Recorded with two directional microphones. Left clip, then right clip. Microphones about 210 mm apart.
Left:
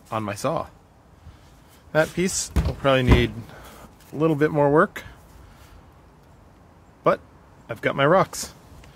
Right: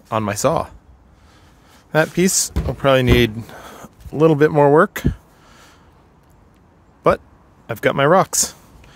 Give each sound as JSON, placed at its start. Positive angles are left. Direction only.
{"t": 0.1, "sound": "speech", "side_deg": -45}
{"t": 1.9, "sound": "speech", "side_deg": -45}
{"t": 7.0, "sound": "speech", "side_deg": -45}